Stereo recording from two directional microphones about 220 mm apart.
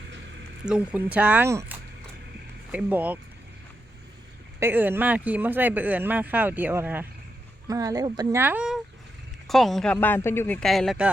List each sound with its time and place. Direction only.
0.6 s speech: 5° right (ahead or behind)
4.6 s speech: 10° right (ahead or behind)